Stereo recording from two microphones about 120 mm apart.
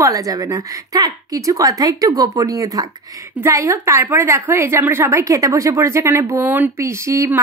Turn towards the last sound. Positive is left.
turn(degrees=-25)  # may be behind; listen again after turning